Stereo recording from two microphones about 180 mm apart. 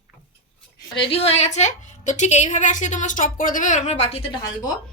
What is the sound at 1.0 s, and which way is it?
A woman's voice, 30° left (ahead or behind).